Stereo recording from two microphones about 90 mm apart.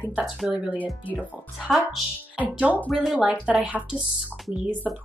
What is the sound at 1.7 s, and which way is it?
Speech, centre (ahead or behind).